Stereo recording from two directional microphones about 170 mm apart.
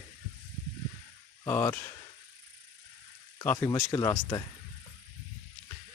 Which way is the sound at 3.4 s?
15° left (ahead or behind).